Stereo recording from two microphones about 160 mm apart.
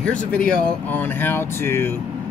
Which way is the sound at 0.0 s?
5° left (ahead or behind).